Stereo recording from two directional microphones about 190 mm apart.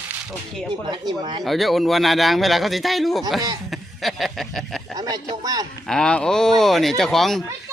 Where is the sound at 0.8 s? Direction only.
25° right (ahead or behind).